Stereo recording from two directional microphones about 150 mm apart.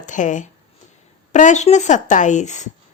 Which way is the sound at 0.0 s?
55° left (ahead or behind).